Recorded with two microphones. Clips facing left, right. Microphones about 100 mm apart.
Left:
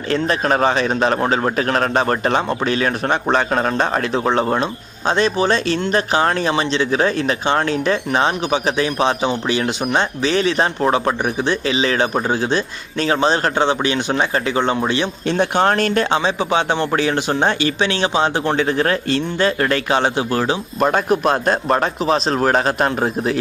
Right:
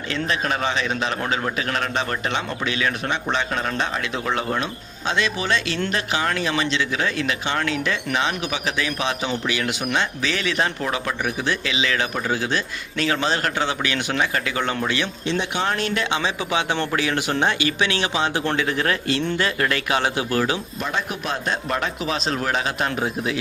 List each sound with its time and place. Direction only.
0.1 s speech: 40° left (ahead or behind); by 15.1 s 25° left (ahead or behind)
15.3 s speech: 50° left (ahead or behind); by 20.6 s 30° left (ahead or behind)
20.7 s speech: 50° left (ahead or behind)